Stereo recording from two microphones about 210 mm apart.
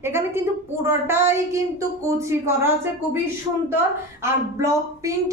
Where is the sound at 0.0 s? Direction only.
10° right (ahead or behind).